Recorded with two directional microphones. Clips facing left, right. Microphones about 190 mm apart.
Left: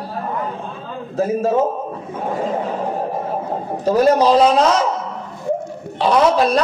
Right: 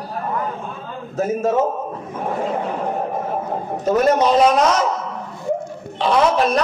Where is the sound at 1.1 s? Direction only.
30° left (ahead or behind).